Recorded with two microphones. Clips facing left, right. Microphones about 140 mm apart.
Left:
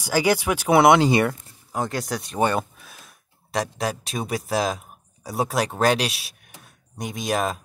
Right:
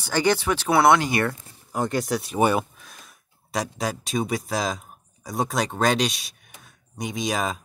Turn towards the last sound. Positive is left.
turn(degrees=0)  # may be behind; listen again after turning